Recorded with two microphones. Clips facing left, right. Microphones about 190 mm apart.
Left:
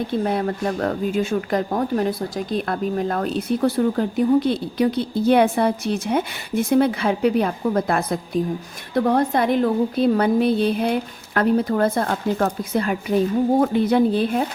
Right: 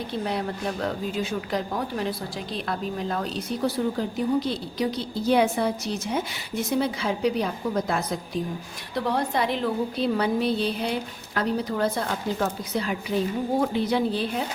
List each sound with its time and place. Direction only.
0.1 s a woman's voice: 50° left (ahead or behind)